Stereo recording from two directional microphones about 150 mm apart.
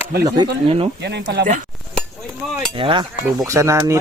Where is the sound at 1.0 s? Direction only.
75° right (ahead or behind).